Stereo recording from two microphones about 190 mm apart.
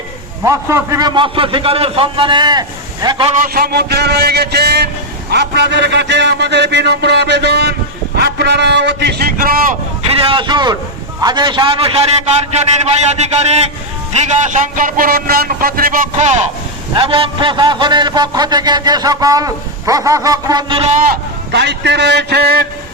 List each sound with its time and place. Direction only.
0.4 s a man's voice: 15° right (ahead or behind)
3.4 s a man's voice: 50° right (ahead or behind)
10.1 s a man's voice: 30° right (ahead or behind)
16.9 s a man's voice: 25° right (ahead or behind)
21.1 s a man's voice: 65° right (ahead or behind)